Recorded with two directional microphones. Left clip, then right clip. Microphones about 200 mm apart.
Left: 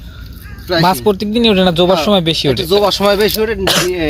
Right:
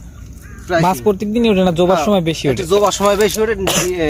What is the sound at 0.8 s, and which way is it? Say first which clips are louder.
Speech: left 4 dB; 5° right (ahead or behind).